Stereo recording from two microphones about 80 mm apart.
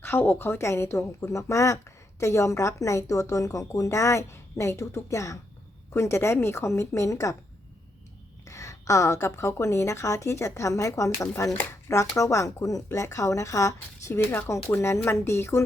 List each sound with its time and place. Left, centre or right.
0.0 s a woman's voice: left
8.4 s a woman's voice: left
14.3 s a woman's voice: left